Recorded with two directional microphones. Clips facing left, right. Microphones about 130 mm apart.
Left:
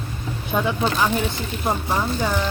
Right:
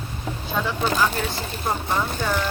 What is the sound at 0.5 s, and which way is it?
Speech, 20° left (ahead or behind).